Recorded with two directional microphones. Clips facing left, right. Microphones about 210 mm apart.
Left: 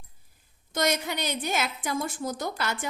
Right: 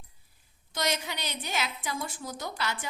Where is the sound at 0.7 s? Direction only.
50° left (ahead or behind).